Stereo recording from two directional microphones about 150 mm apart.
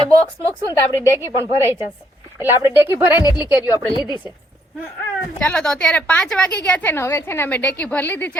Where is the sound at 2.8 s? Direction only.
15° right (ahead or behind).